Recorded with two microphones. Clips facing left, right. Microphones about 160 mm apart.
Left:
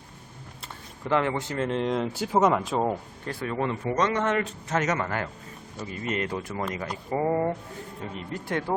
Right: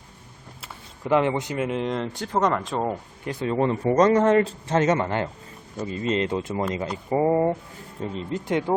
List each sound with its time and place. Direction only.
0.6 s speech: 15° right (ahead or behind); by 3.0 s 5° left (ahead or behind)
3.2 s a man's voice: 25° right (ahead or behind)